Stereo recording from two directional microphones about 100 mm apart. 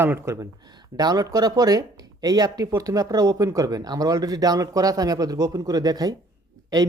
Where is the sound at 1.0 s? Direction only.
40° right (ahead or behind).